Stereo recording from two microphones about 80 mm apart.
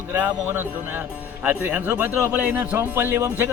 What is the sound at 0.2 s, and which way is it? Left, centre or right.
Speech, right.